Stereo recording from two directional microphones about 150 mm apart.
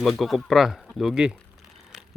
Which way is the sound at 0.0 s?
Centre (ahead or behind).